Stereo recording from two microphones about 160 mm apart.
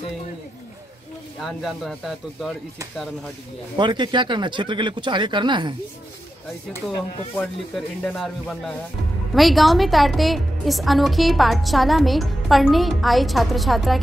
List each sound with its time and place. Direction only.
1.4 s a woman's voice: centre (ahead or behind)
3.7 s speech: 30° right (ahead or behind)
7.3 s a woman's voice: 5° left (ahead or behind)